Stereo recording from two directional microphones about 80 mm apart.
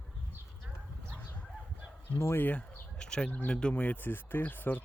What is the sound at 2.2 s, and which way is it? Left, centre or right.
Speech, left.